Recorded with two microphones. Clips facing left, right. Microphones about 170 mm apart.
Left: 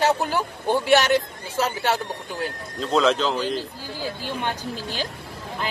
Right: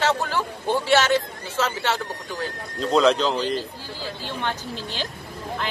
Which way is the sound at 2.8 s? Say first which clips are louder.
Right 2 dB; centre (ahead or behind).